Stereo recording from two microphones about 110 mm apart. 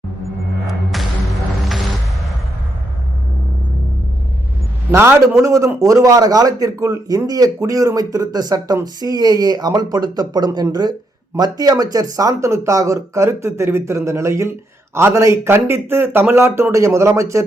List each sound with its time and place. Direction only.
0.7 s music: centre (ahead or behind)
4.9 s a man's voice: 25° right (ahead or behind)